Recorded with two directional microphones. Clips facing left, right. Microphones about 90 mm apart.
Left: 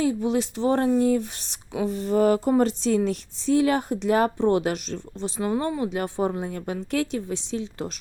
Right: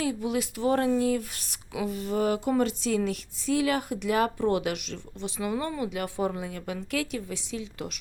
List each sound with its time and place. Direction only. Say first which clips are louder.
0.0 s speech: left 5 dB; 30° left (ahead or behind)